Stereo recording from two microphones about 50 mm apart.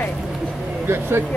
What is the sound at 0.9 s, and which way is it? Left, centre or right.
Speech, right.